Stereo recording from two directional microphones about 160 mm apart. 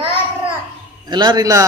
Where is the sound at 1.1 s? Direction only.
30° right (ahead or behind).